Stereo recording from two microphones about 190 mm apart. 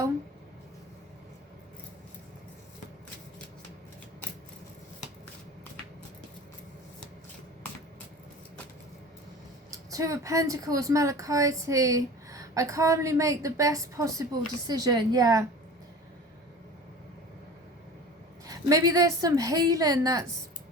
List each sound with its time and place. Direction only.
9.9 s a woman's voice: 15° right (ahead or behind)
18.4 s a woman's voice: 20° right (ahead or behind)